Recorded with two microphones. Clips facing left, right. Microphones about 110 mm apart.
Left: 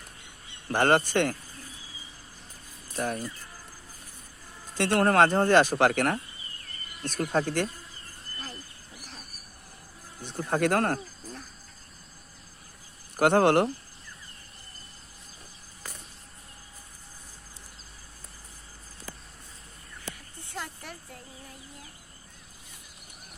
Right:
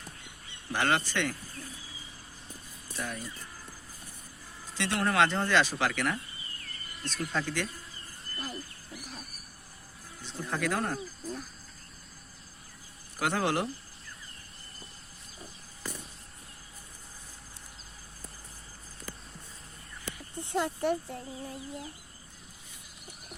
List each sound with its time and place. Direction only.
0.7 s speech: 50° left (ahead or behind)
2.9 s speech: 50° left (ahead or behind)
4.7 s speech: 50° left (ahead or behind)
10.2 s speech: 55° left (ahead or behind)
13.1 s speech: 55° left (ahead or behind)
20.4 s speech: 20° right (ahead or behind)